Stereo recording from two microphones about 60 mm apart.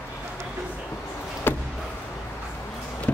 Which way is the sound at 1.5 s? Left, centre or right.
Left.